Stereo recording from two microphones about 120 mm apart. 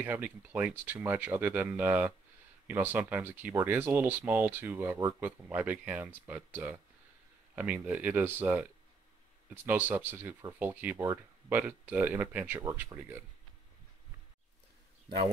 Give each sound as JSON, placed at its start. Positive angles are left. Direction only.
{"t": 0.0, "sound": "speech", "side_deg": -15}